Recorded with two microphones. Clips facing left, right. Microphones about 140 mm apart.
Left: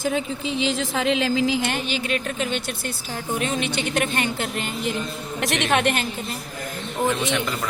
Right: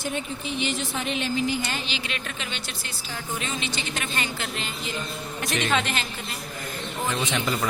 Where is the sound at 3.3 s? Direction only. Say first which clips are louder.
Left 8 dB; 60° left (ahead or behind).